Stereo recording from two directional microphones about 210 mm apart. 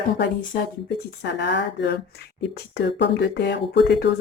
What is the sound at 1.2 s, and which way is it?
Speech, 55° left (ahead or behind).